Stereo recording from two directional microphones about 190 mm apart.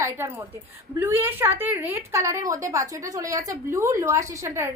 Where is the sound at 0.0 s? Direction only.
15° right (ahead or behind).